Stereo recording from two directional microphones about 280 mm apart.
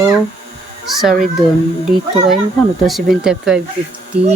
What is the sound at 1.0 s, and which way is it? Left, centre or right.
Speech, centre.